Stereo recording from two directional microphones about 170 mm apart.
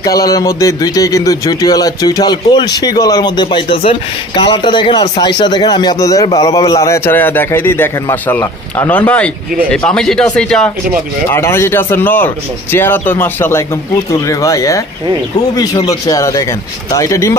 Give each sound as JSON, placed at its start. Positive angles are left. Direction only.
{"t": 0.0, "sound": "a man's voice", "side_deg": 20}